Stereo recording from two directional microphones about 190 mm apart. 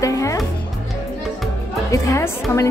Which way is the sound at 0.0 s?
15° left (ahead or behind).